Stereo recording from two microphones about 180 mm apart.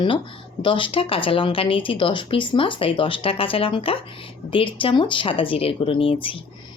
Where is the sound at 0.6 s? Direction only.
30° left (ahead or behind).